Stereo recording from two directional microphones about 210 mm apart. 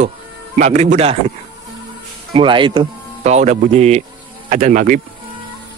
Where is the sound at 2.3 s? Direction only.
25° right (ahead or behind).